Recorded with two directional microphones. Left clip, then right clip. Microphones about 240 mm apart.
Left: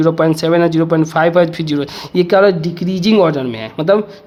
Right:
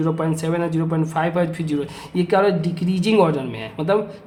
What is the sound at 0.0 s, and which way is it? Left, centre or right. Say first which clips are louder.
Speech: left 10 dB; left.